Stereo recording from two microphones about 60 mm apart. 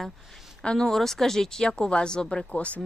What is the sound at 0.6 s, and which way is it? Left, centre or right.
A woman's voice, centre.